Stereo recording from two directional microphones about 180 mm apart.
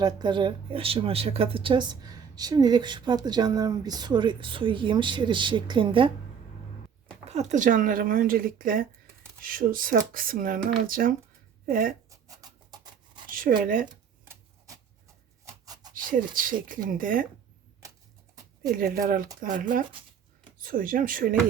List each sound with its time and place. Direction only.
0.0 s speech: 25° right (ahead or behind)
7.3 s speech: 40° right (ahead or behind)
12.1 s rub: 20° right (ahead or behind)
13.2 s a sound: 50° right (ahead or behind)
13.6 s speech: 50° right (ahead or behind)
15.6 s a sound: 20° right (ahead or behind)
16.0 s speech: 50° right (ahead or behind)
18.8 s speech: 50° right (ahead or behind)
19.9 s a sound: 30° right (ahead or behind)
20.6 s speech: 50° right (ahead or behind)